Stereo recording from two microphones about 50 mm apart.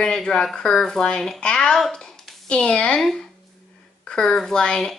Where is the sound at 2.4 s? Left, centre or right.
Left.